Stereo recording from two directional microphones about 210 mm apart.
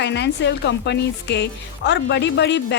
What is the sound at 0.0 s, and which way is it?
A woman's voice, 55° left (ahead or behind).